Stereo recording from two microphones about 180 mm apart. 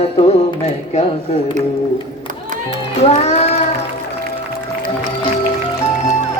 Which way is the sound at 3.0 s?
35° left (ahead or behind).